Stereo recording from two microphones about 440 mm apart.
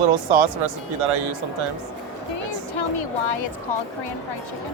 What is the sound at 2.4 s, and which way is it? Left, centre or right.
Speech, left.